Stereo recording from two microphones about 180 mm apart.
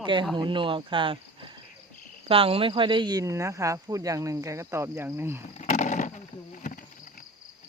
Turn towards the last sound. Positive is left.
turn(degrees=50)  # may be behind; listen again after turning